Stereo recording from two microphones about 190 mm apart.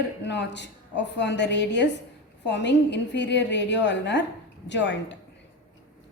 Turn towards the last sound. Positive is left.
turn(degrees=70)  # may be behind; listen again after turning